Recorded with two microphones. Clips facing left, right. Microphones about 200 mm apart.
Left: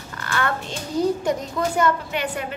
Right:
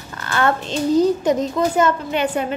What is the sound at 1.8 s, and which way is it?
Speech, 25° right (ahead or behind).